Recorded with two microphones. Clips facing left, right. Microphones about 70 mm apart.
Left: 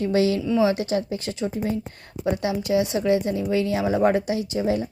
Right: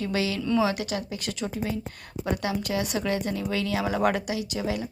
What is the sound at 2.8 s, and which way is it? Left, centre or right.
A woman's voice, left.